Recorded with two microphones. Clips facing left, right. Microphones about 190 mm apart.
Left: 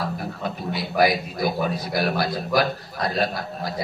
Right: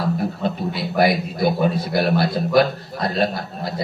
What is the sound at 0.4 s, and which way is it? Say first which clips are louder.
A man's voice: right 5 dB; 25° right (ahead or behind).